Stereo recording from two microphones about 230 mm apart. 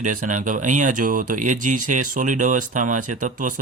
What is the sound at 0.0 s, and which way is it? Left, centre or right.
Speech, right.